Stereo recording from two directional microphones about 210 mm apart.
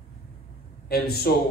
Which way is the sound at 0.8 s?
50° left (ahead or behind).